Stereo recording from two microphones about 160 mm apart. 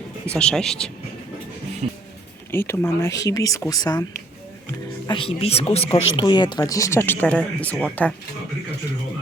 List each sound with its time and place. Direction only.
0.3 s speech: 5° left (ahead or behind)
1.8 s music: 45° right (ahead or behind)
2.5 s speech: 15° left (ahead or behind)
5.0 s speech: 30° left (ahead or behind); by 8.1 s 10° left (ahead or behind)